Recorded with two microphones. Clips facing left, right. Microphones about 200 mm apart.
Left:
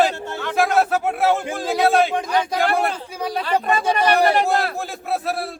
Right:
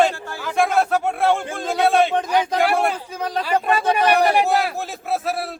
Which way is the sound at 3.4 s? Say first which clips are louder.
Right 1 dB; 10° right (ahead or behind).